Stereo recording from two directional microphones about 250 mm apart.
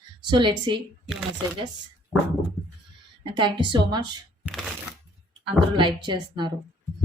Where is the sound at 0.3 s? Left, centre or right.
Centre.